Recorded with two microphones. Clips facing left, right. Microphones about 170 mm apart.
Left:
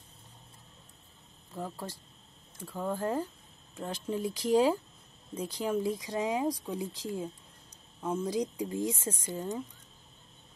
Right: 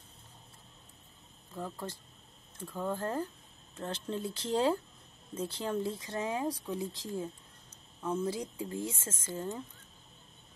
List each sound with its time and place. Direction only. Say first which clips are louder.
1.5 s speech: left 1 dB; 10° left (ahead or behind)